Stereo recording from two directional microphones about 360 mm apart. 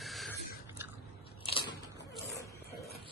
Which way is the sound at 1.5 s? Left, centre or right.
Centre.